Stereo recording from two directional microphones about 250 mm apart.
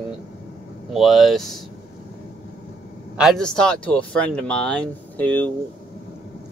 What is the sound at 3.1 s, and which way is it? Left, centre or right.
Speech, centre.